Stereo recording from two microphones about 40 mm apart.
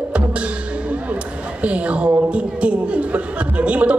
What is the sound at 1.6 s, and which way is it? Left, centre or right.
A woman's voice, right.